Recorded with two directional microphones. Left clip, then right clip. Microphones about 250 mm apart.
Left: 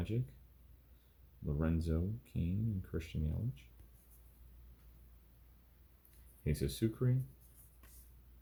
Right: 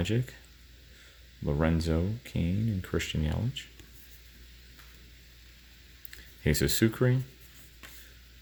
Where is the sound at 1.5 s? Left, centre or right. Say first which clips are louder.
Right 10 dB; right.